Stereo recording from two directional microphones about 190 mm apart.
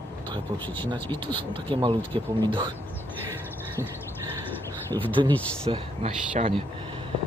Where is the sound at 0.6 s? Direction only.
10° left (ahead or behind).